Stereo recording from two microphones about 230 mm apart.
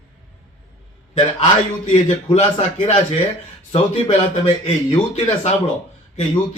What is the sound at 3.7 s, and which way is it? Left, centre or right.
Speech, left.